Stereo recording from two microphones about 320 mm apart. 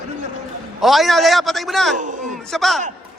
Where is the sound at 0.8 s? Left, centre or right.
Centre.